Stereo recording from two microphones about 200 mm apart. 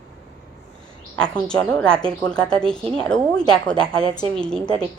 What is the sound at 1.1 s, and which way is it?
A woman's voice, 5° left (ahead or behind).